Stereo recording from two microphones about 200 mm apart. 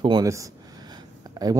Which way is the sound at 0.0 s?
20° right (ahead or behind).